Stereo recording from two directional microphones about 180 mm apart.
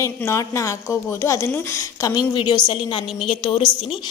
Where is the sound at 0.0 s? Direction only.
15° left (ahead or behind).